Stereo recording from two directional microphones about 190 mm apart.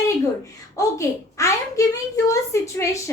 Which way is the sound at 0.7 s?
15° left (ahead or behind).